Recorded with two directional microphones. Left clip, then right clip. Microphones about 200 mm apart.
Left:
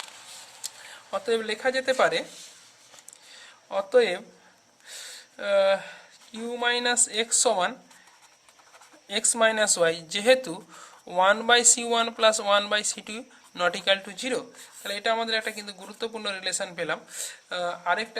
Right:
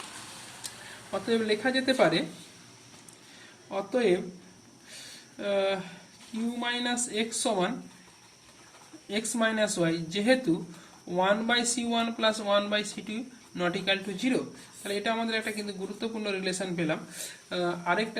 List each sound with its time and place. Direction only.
1.1 s speech: 45° left (ahead or behind)
3.7 s speech: 55° left (ahead or behind)
5.4 s speech: 55° left (ahead or behind)
9.0 s speech: 55° left (ahead or behind)